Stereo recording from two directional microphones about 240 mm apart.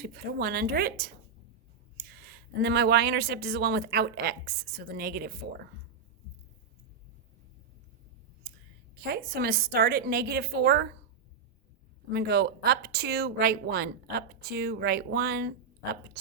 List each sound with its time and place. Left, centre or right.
0.0 s speech: right
9.0 s speech: right
12.1 s speech: right